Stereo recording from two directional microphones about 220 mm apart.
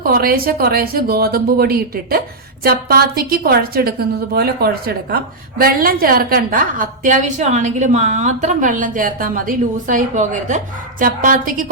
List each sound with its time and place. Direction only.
0.1 s a woman's voice: 45° right (ahead or behind)